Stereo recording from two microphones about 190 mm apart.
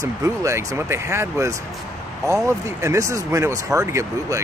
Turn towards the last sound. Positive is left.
turn(degrees=-15)  # may be behind; listen again after turning